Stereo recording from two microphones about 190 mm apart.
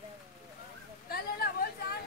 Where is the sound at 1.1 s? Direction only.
55° left (ahead or behind).